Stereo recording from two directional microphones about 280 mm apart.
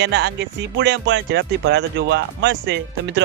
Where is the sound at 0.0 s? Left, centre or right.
Right.